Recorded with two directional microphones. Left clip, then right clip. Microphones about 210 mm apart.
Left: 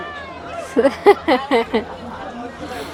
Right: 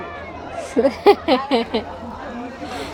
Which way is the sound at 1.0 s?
15° left (ahead or behind).